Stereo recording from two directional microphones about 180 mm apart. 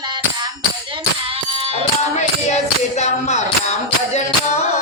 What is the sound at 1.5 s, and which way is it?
Music, 30° right (ahead or behind).